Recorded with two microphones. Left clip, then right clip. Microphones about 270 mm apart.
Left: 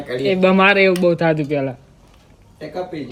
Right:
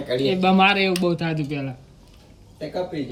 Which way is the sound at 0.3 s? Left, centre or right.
Centre.